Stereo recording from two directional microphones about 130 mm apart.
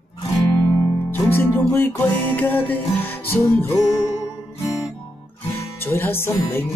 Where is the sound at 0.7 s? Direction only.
20° left (ahead or behind).